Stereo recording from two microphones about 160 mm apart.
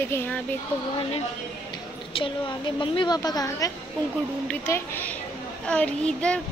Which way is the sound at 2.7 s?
30° left (ahead or behind).